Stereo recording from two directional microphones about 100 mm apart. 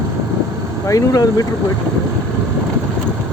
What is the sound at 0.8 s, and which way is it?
Speech, 40° left (ahead or behind).